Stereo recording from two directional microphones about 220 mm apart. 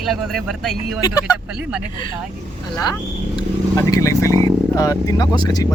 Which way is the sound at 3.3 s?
15° left (ahead or behind).